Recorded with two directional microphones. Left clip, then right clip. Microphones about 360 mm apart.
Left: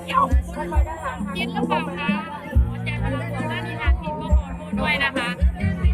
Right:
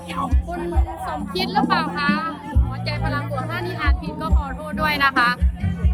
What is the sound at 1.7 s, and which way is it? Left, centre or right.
Speech, centre.